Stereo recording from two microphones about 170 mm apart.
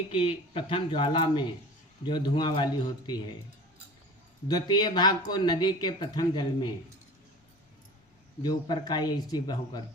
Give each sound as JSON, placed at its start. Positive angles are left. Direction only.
{"t": 0.1, "sound": "speech", "side_deg": 30}
{"t": 4.4, "sound": "speech", "side_deg": 25}
{"t": 8.4, "sound": "speech", "side_deg": 25}